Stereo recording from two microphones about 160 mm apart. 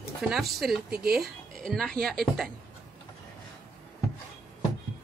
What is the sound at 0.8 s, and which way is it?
Speech, 80° right.